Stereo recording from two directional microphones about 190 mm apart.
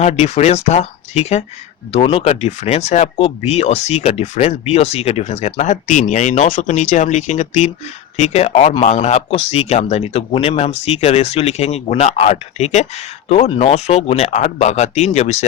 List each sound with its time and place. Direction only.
0.0 s speech: 35° left (ahead or behind)